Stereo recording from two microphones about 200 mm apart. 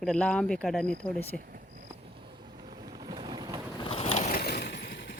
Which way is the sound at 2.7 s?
20° right (ahead or behind).